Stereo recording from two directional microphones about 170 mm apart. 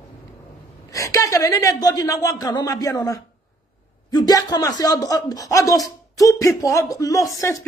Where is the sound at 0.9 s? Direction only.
20° left (ahead or behind).